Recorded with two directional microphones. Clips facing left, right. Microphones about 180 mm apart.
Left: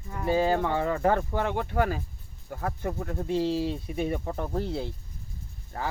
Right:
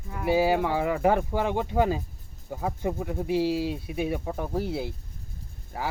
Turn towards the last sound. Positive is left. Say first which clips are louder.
# right 1 dB
turn(degrees=-5)  # may be behind; listen again after turning